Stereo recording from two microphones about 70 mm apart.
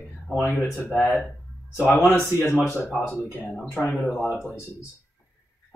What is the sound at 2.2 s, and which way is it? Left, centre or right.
Speech, left.